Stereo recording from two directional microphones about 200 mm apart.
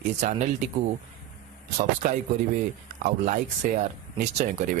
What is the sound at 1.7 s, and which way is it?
Speech, 40° right (ahead or behind).